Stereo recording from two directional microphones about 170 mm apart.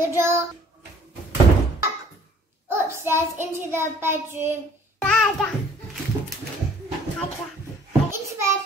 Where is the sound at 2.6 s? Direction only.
15° right (ahead or behind).